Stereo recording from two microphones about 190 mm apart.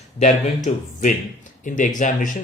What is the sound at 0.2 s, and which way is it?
Speech, 35° left (ahead or behind).